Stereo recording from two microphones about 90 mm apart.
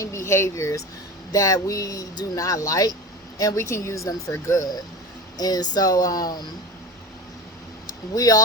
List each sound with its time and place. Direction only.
0.0 s speech: 30° left (ahead or behind)
7.9 s speech: 45° left (ahead or behind)